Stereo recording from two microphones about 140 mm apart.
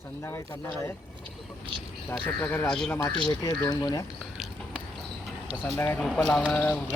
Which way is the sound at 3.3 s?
25° left (ahead or behind).